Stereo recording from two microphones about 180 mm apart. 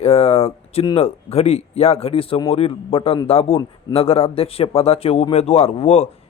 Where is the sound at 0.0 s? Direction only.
35° left (ahead or behind).